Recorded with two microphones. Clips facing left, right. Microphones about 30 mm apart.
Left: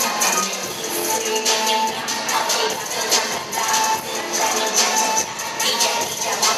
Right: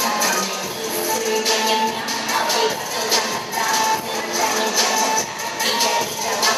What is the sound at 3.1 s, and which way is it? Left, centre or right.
Music, right.